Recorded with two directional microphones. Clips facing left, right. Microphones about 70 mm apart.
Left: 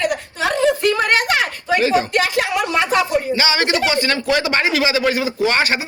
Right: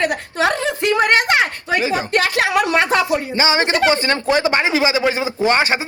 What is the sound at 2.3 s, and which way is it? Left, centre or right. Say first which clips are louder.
Speech: right 2 dB; right.